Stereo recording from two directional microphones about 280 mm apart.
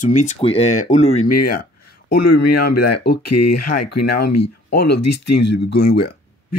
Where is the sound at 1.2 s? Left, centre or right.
Left.